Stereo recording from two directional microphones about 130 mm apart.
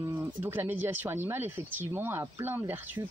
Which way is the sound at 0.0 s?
15° right (ahead or behind).